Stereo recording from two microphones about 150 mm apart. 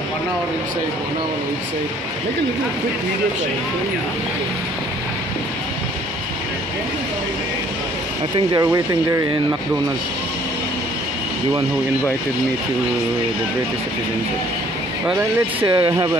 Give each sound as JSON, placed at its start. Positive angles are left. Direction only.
{"t": 8.5, "sound": "speech", "side_deg": -20}
{"t": 15.6, "sound": "speech", "side_deg": -25}